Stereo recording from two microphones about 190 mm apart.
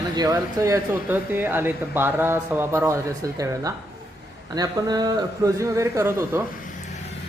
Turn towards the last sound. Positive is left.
turn(degrees=-15)  # may be behind; listen again after turning